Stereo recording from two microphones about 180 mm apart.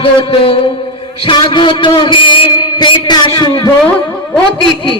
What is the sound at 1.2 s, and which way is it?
A man's voice, 30° left (ahead or behind).